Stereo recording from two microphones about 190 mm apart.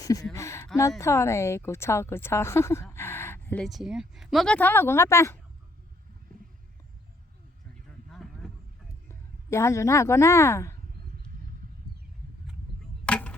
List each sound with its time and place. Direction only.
0.0 s a woman's voice: 15° left (ahead or behind)
8.1 s a sound: centre (ahead or behind)
9.0 s a woman's voice: 15° left (ahead or behind)
13.1 s chopping: 5° left (ahead or behind)